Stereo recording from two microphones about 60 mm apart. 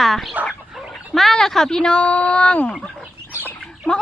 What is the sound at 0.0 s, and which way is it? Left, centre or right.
Fowl, centre.